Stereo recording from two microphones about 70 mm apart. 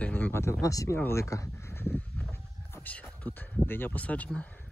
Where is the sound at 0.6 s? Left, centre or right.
Left.